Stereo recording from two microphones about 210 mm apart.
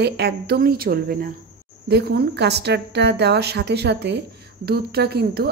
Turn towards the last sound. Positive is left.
turn(degrees=-50)  # may be behind; listen again after turning